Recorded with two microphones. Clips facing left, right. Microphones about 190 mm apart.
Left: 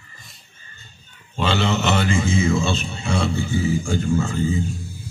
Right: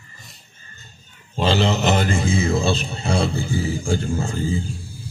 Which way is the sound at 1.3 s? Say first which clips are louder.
Right 2 dB; 35° right (ahead or behind).